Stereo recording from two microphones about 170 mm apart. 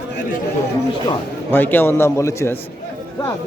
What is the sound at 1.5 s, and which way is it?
A man's voice, 10° left (ahead or behind).